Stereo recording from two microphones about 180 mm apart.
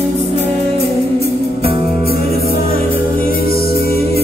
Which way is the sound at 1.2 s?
60° left (ahead or behind).